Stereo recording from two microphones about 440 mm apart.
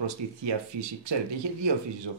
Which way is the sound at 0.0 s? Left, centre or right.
Right.